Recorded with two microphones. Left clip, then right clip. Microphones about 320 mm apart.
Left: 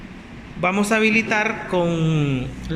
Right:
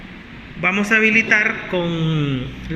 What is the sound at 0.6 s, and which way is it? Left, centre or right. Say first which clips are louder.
A man's voice: right 3 dB; centre.